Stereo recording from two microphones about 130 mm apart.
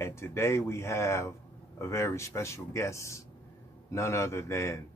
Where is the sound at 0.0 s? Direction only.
20° left (ahead or behind).